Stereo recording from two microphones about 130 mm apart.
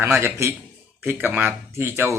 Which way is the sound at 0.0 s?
15° right (ahead or behind).